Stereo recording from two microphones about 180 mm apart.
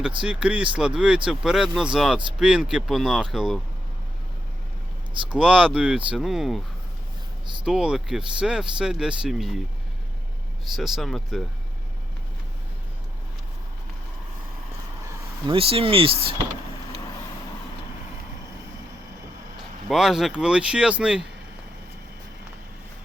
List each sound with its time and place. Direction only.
0.2 s speech: 5° right (ahead or behind)
5.3 s speech: 5° right (ahead or behind)
7.6 s speech: 5° right (ahead or behind)
10.8 s speech: centre (ahead or behind)
15.4 s speech: 30° right (ahead or behind)
19.9 s speech: centre (ahead or behind)